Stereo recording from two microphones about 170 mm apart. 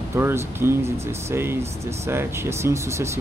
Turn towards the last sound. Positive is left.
turn(degrees=-15)  # may be behind; listen again after turning